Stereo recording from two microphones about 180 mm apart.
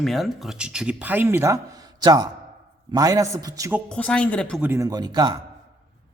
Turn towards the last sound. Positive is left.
turn(degrees=-25)  # may be behind; listen again after turning